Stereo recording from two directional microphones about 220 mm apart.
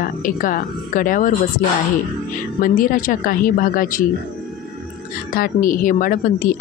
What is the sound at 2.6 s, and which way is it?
Speech, 40° left (ahead or behind).